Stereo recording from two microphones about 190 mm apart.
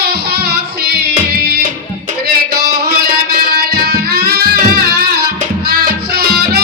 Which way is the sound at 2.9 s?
55° right (ahead or behind).